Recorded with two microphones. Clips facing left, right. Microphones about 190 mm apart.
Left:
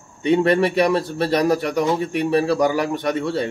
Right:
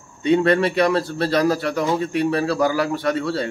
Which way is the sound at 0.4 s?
20° left (ahead or behind).